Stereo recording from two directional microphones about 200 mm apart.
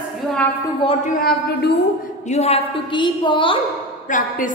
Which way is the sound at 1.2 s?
50° left (ahead or behind).